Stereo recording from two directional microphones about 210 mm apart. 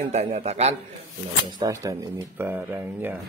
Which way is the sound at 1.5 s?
20° right (ahead or behind).